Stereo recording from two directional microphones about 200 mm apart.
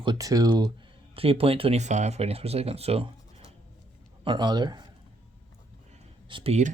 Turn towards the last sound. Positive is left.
turn(degrees=-30)  # may be behind; listen again after turning